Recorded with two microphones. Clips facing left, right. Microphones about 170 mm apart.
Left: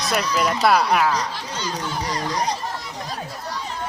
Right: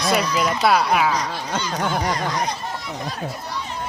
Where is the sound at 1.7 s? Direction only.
60° right (ahead or behind).